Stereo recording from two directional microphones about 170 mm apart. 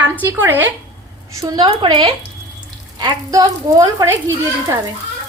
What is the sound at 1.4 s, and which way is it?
Speech, 25° right (ahead or behind).